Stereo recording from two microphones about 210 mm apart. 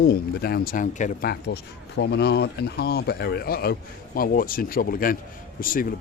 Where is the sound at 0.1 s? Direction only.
45° left (ahead or behind).